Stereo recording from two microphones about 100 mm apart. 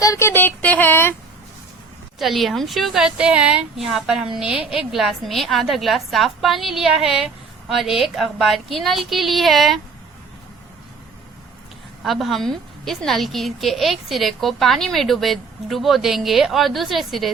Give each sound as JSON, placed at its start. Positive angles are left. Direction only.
{"t": 0.0, "sound": "a sound", "side_deg": 35}
{"t": 0.3, "sound": "child singing", "side_deg": 20}
{"t": 2.1, "sound": "a woman's voice", "side_deg": 0}
{"t": 12.0, "sound": "a woman's voice", "side_deg": 0}